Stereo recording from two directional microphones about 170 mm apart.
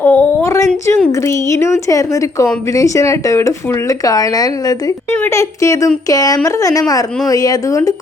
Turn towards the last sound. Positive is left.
turn(degrees=20)  # may be behind; listen again after turning